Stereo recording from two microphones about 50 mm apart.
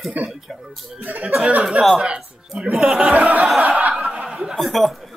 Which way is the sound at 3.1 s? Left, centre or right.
Right.